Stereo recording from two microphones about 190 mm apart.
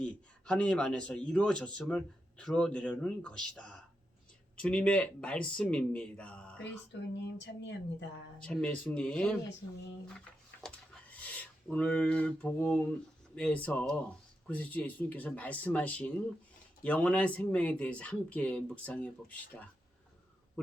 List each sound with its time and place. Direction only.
0.0 s a man's voice: 5° left (ahead or behind)
6.9 s speech: 70° left (ahead or behind)
8.4 s a man's voice: 5° left (ahead or behind)
10.2 s a sound: 5° left (ahead or behind)
13.3 s speech: 5° left (ahead or behind)